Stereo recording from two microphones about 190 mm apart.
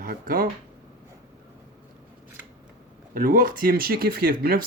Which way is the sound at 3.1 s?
45° right (ahead or behind).